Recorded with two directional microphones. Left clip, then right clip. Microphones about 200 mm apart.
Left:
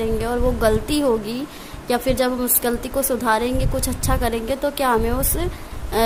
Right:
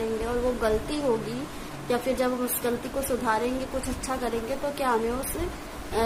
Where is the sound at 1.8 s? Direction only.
55° left (ahead or behind).